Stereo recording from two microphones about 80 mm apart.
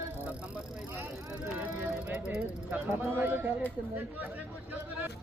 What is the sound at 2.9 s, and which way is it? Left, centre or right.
Speech, right.